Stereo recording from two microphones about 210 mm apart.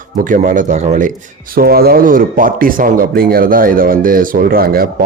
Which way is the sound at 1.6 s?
45° right (ahead or behind).